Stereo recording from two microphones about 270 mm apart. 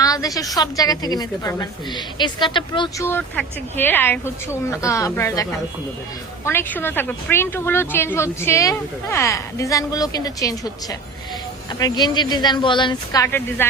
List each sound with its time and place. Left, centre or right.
0.0 s a sound: centre
0.5 s a woman's voice: centre
11.8 s a woman's voice: centre